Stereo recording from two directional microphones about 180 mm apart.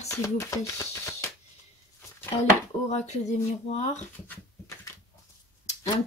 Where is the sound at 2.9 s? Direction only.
40° left (ahead or behind).